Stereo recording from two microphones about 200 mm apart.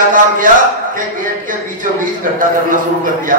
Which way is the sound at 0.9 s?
40° right (ahead or behind).